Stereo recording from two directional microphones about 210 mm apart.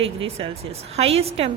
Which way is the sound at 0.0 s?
25° right (ahead or behind).